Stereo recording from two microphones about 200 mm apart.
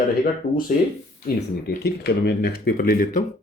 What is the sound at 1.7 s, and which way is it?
Speech, 50° left (ahead or behind).